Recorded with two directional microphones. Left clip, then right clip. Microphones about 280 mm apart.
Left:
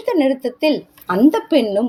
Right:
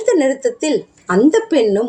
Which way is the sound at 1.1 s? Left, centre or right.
Left.